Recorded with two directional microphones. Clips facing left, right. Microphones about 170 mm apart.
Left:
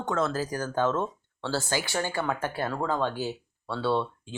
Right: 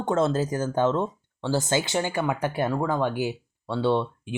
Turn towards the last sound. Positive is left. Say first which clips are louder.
# right 3 dB
turn(degrees=-15)  # may be behind; listen again after turning